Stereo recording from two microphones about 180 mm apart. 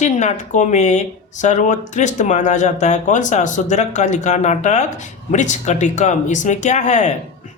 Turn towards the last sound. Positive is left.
turn(degrees=40)  # may be behind; listen again after turning